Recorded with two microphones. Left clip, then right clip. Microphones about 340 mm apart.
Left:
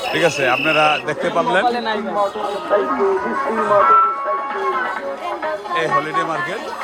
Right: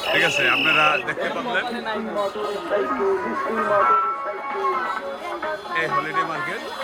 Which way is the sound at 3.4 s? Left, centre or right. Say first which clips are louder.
Left 5 dB; left.